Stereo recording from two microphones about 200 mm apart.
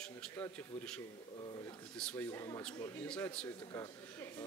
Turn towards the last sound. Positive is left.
turn(degrees=15)  # may be behind; listen again after turning